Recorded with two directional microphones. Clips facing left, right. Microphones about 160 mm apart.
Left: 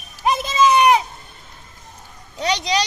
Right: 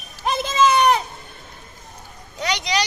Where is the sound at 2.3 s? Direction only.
30° left (ahead or behind).